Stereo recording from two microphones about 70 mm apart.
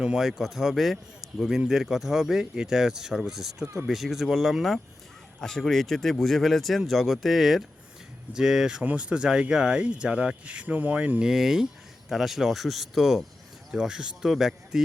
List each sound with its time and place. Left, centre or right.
0.0 s a man's voice: centre
8.8 s speech: centre
11.3 s a man's voice: centre